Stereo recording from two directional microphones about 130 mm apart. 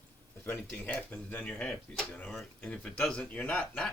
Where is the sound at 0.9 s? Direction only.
10° left (ahead or behind).